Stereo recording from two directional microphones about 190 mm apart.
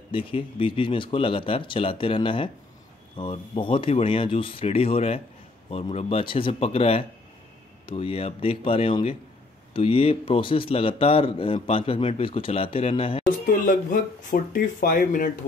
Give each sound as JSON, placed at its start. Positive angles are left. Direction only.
{"t": 0.1, "sound": "a man's voice", "side_deg": 25}
{"t": 14.3, "sound": "speech", "side_deg": 45}